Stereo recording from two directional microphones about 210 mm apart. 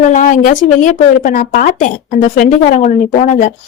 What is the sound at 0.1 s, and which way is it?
Speech, 40° left (ahead or behind).